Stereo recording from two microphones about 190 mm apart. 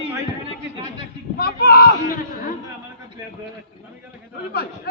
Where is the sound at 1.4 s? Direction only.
55° left (ahead or behind).